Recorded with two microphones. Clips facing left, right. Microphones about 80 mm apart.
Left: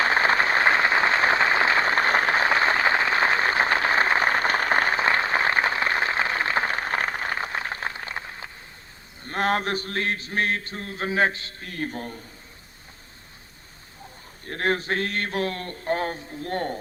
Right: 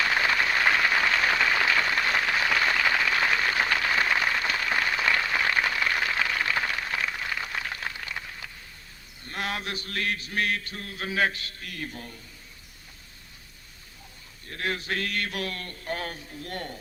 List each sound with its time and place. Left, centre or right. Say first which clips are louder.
0.0 s a sound: left 4 dB; left
9.2 s mantra: left 8 dB; left
14.4 s speech: left 6 dB; left